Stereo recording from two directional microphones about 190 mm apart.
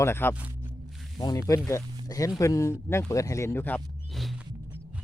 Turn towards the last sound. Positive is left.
turn(degrees=5)  # may be behind; listen again after turning